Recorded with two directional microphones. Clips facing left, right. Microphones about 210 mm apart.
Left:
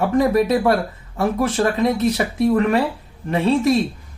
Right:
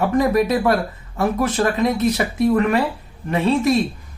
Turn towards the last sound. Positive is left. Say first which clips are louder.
# left 1 dB
turn(degrees=30)  # may be behind; listen again after turning